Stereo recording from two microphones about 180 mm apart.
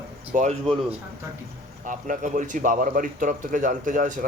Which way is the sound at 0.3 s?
40° right (ahead or behind).